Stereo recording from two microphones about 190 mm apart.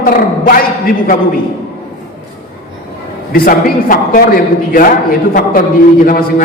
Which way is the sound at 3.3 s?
50° left (ahead or behind).